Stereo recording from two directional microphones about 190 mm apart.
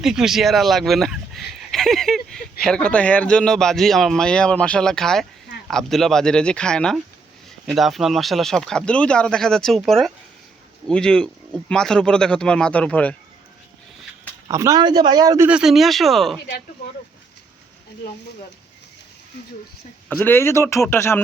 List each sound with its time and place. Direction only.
0.0 s speech: 5° right (ahead or behind)
14.4 s a man's voice: 15° right (ahead or behind)
15.4 s speech: 5° right (ahead or behind)
20.1 s speech: 10° left (ahead or behind)